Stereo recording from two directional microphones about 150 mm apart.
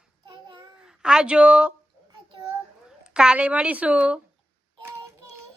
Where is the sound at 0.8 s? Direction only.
5° right (ahead or behind).